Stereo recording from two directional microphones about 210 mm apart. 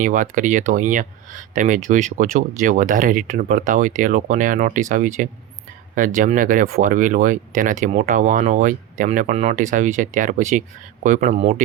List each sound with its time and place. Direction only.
0.0 s speech: 40° right (ahead or behind)